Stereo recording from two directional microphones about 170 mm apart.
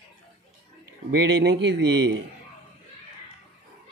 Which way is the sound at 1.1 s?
80° right.